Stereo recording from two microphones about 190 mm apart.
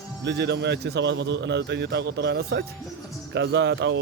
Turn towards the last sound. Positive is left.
turn(degrees=-65)  # may be behind; listen again after turning